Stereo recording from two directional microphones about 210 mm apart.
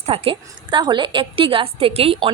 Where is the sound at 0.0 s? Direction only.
30° right (ahead or behind).